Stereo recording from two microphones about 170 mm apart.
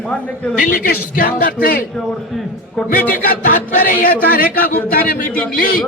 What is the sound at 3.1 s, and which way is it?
A man's voice, 55° left (ahead or behind).